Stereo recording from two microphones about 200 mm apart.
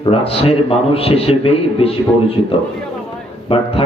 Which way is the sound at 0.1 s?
30° left (ahead or behind).